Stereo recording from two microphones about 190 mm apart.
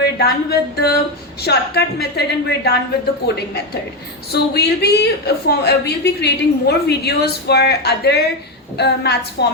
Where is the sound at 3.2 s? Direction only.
60° left (ahead or behind).